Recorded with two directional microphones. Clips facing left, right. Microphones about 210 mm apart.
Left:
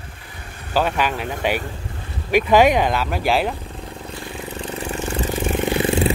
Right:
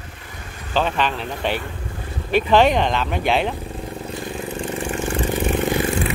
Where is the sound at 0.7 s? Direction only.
10° left (ahead or behind).